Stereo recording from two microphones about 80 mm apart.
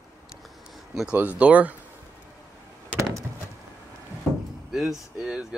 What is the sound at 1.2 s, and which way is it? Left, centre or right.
Speech, centre.